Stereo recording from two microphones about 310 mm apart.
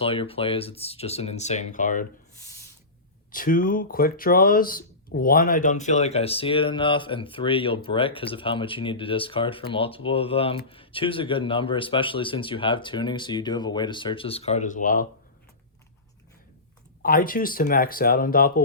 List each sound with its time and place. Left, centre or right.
0.0 s speech: centre
3.3 s speech: left
17.0 s speech: left